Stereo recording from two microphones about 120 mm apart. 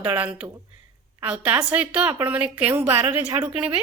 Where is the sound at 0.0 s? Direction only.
10° right (ahead or behind).